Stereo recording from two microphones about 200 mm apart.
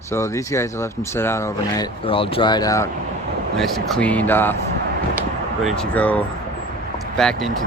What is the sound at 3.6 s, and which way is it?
Speech, 5° left (ahead or behind).